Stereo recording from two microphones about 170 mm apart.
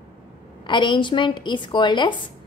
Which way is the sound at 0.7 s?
25° left (ahead or behind).